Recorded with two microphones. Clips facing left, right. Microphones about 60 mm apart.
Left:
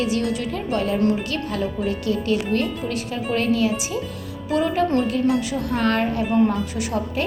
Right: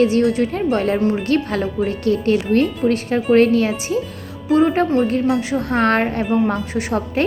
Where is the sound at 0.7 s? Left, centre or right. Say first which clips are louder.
Left 1 dB; right.